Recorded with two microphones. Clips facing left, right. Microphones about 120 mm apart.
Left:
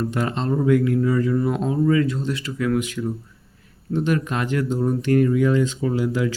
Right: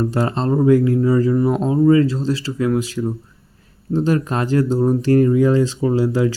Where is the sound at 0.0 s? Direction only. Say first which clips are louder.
Right 4 dB; 35° right (ahead or behind).